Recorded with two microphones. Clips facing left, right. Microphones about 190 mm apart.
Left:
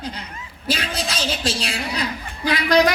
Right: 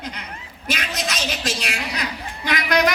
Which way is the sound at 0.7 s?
30° left (ahead or behind).